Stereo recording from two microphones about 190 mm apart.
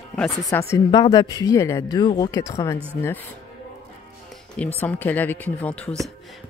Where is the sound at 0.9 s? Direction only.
20° left (ahead or behind).